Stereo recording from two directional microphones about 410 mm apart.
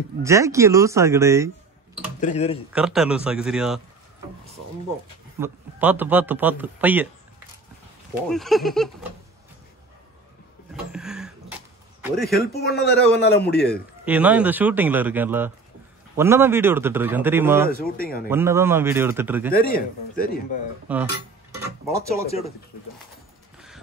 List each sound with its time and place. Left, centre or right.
0.2 s speech: centre
2.1 s speech: centre
2.7 s a man's voice: centre
5.4 s a man's voice: centre
8.3 s a man's voice: centre
10.7 s a sound: centre
12.3 s a man's voice: left
14.0 s a man's voice: centre
17.6 s a man's voice: left
18.3 s a man's voice: centre
19.5 s a man's voice: left
20.9 s a man's voice: centre